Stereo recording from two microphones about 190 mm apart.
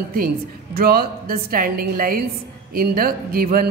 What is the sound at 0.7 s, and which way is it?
A man's voice, 55° right (ahead or behind).